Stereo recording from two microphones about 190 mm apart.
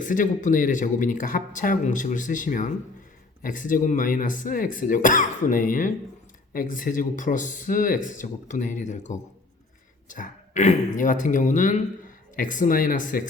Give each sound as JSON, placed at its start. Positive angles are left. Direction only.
{"t": 0.0, "sound": "speech", "side_deg": 45}